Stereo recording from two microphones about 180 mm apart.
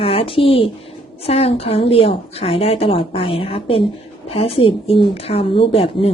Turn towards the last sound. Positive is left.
turn(degrees=30)  # may be behind; listen again after turning